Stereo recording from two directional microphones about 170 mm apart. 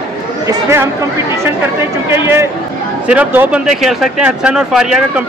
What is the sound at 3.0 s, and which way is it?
A man's voice, 10° right (ahead or behind).